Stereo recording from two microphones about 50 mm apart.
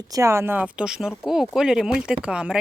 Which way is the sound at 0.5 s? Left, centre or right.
Right.